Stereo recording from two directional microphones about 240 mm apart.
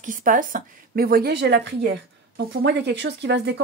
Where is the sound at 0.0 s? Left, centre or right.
Right.